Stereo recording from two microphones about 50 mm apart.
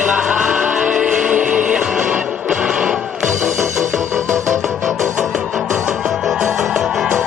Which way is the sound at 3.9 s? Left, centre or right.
Right.